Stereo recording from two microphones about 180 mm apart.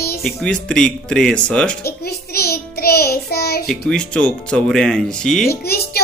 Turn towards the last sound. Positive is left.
turn(degrees=60)  # may be behind; listen again after turning